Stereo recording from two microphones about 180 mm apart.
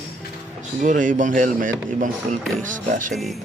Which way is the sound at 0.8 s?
45° right (ahead or behind).